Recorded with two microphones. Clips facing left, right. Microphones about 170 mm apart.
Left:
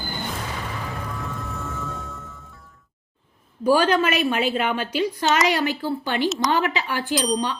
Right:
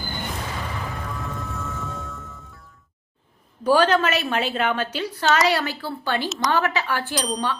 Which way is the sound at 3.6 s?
10° left (ahead or behind).